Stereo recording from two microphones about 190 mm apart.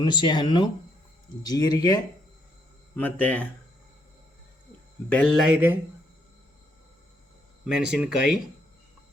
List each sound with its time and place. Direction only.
0.0 s speech: 25° left (ahead or behind)
2.9 s speech: 10° left (ahead or behind)
5.0 s speech: 5° left (ahead or behind)
7.6 s speech: 5° right (ahead or behind)